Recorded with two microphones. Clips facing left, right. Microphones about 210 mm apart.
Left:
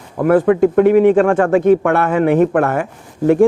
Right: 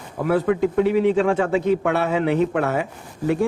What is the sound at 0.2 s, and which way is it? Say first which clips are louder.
A man's voice: left 8 dB; 55° left (ahead or behind).